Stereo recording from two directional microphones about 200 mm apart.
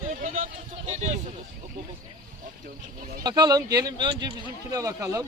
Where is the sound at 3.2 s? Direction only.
20° right (ahead or behind).